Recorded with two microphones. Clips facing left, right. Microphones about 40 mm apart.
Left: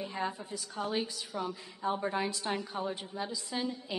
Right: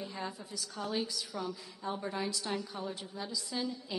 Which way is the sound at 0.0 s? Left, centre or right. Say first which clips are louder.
Left 5 dB; left.